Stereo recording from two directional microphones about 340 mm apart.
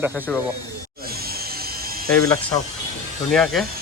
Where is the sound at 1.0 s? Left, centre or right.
Right.